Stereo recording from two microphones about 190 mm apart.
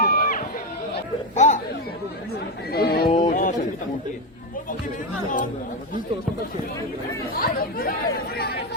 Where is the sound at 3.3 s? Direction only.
45° left (ahead or behind).